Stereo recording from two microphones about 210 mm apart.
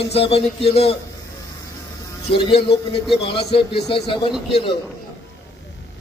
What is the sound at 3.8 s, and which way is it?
Speech, 50° left (ahead or behind).